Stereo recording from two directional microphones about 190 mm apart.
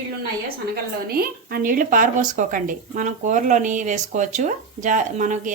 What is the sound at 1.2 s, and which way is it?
A woman's voice, 50° right (ahead or behind).